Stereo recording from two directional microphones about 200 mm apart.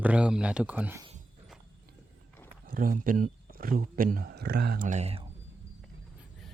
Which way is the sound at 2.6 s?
45° right (ahead or behind).